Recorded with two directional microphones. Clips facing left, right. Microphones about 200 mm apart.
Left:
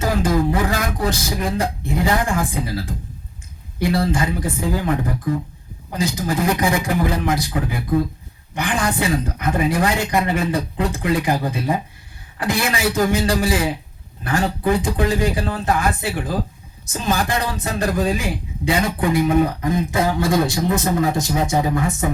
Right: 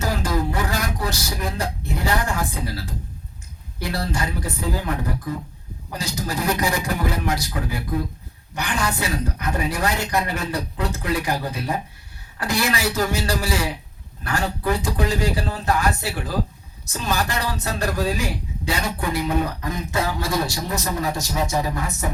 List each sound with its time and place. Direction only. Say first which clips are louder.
0.0 s speech: left 5 dB; 50° left (ahead or behind)
8.5 s speech: left 4 dB; 50° left (ahead or behind)